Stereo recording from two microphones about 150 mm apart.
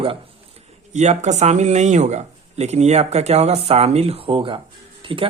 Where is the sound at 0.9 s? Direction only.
50° right (ahead or behind).